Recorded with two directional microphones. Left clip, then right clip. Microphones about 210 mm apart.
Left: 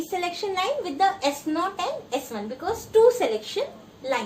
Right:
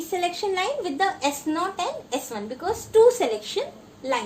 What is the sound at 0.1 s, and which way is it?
A woman's voice, 40° right (ahead or behind).